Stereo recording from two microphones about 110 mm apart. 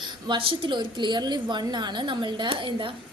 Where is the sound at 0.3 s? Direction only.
50° right (ahead or behind).